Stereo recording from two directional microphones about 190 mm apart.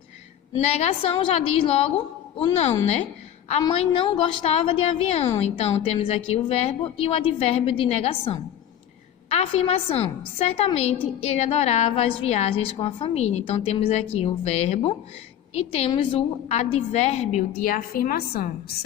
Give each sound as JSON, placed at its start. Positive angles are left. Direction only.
{"t": 0.6, "sound": "a woman's voice", "side_deg": 35}